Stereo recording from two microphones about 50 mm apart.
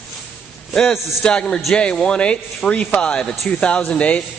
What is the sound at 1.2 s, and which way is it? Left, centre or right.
A man's voice, centre.